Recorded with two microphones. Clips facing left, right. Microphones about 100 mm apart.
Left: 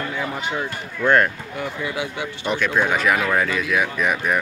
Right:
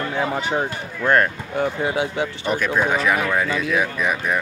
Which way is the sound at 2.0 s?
35° right (ahead or behind).